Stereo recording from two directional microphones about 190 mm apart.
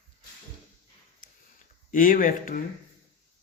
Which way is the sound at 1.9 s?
45° left (ahead or behind).